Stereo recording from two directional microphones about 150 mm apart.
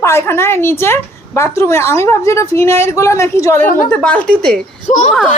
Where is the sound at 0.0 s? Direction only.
20° left (ahead or behind).